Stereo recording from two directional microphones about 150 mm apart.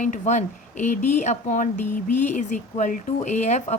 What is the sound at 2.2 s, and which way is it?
Speech, 55° left (ahead or behind).